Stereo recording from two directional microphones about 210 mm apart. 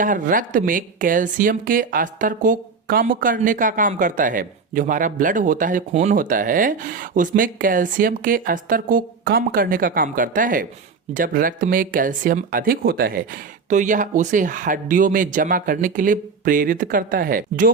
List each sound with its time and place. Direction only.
0.0 s speech: 40° right (ahead or behind)